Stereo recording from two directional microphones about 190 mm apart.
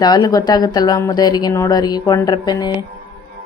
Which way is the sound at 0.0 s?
20° left (ahead or behind).